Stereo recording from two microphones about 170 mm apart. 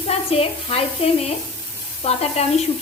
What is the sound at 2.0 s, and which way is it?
Speech, 35° left (ahead or behind).